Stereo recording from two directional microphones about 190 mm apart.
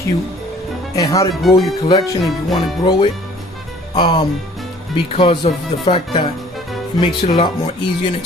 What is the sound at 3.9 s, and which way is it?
Speech, 25° left (ahead or behind).